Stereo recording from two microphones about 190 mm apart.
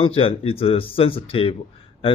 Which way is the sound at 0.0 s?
30° left (ahead or behind).